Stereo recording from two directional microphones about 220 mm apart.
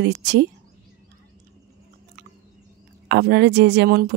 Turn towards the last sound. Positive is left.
turn(degrees=-45)  # may be behind; listen again after turning